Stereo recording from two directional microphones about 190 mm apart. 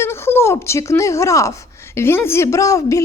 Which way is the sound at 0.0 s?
10° left (ahead or behind).